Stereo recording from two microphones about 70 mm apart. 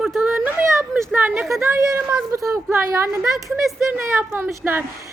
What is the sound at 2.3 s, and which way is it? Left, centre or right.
Speech, right.